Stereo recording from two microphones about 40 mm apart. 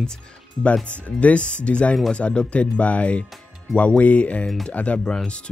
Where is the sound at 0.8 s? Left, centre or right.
Left.